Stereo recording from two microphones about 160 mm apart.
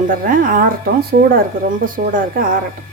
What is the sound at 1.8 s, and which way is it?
Speech, 60° right (ahead or behind).